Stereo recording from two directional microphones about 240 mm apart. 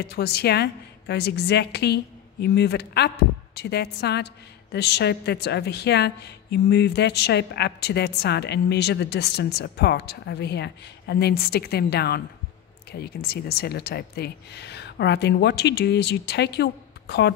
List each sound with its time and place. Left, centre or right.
0.0 s a woman's voice: left